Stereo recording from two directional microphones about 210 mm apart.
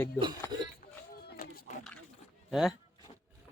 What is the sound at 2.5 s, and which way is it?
Speech, centre (ahead or behind).